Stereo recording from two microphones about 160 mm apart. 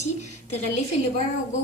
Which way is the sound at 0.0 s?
45° left (ahead or behind).